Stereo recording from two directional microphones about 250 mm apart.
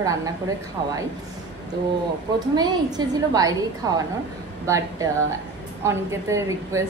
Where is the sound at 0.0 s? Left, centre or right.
Centre.